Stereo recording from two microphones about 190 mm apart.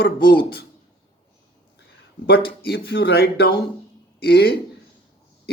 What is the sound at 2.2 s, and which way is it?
Speech, 55° left (ahead or behind).